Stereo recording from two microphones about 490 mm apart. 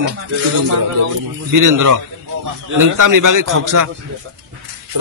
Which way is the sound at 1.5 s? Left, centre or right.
Right.